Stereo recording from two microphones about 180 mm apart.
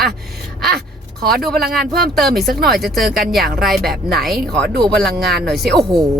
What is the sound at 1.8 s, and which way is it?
Speech, 60° right (ahead or behind).